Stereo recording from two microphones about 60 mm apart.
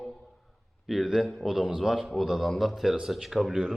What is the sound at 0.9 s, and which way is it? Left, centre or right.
A man's voice, centre.